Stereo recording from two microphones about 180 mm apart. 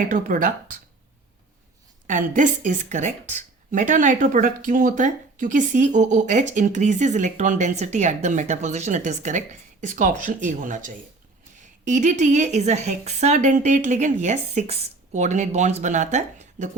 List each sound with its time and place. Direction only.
0.1 s speech: 50° right (ahead or behind)
2.0 s a woman's voice: 45° right (ahead or behind)